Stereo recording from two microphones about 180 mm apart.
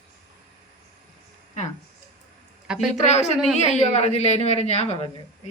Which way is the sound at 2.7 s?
40° left (ahead or behind).